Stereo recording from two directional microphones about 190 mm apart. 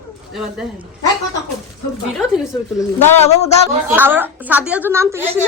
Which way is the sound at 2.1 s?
Centre (ahead or behind).